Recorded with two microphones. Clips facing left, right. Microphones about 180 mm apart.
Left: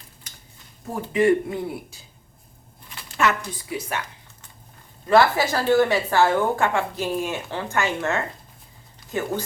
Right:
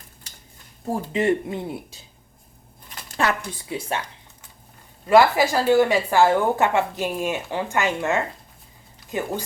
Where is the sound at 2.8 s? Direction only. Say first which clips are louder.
Left 1 dB; 35° right (ahead or behind).